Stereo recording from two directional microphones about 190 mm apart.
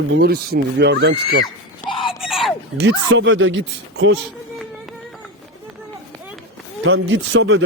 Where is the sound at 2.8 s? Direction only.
75° right (ahead or behind).